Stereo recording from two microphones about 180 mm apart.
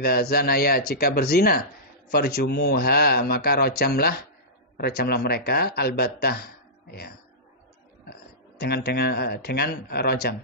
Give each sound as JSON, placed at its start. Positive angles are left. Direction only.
{"t": 0.0, "sound": "a man's voice", "side_deg": 60}
{"t": 8.1, "sound": "speech", "side_deg": 60}